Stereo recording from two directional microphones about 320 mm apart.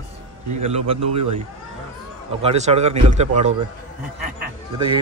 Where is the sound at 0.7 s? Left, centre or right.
Centre.